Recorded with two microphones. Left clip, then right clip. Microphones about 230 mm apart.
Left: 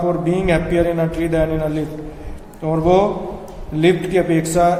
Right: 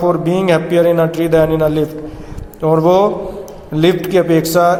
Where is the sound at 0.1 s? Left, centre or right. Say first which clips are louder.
Right 4 dB; right.